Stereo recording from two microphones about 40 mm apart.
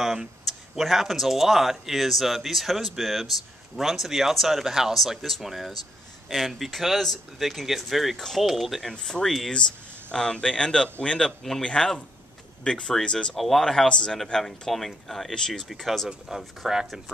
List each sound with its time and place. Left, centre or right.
0.0 s speech: centre
8.2 s speech: centre
8.5 s speech: centre
9.5 s speech: left
13.4 s speech: centre
13.8 s speech: left
14.1 s speech: centre
15.3 s speech: centre
16.3 s speech: centre